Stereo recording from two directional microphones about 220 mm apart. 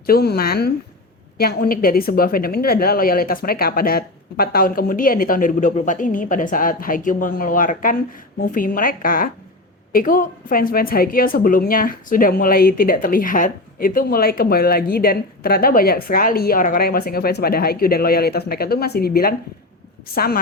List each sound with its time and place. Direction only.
0.0 s a woman's voice: 45° left (ahead or behind)